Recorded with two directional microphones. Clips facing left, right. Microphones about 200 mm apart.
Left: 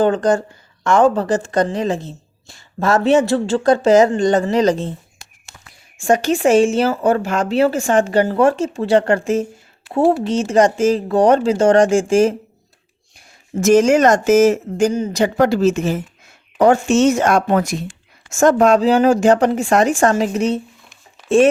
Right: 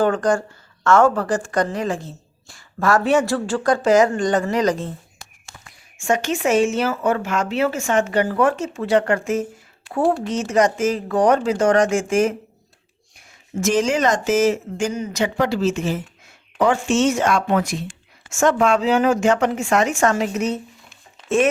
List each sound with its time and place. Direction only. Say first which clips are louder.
0.0 s a woman's voice: left 3 dB; 20° left (ahead or behind)
6.0 s a woman's voice: left 5 dB; 35° left (ahead or behind)
13.1 s speech: left 4 dB; 40° left (ahead or behind)
15.4 s speech: left 6 dB; 45° left (ahead or behind); by 20.6 s 30° left (ahead or behind)